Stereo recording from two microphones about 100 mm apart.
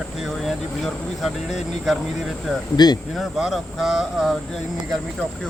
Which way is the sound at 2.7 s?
45° left (ahead or behind).